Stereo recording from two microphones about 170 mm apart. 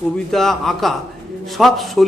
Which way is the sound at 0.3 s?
Centre (ahead or behind).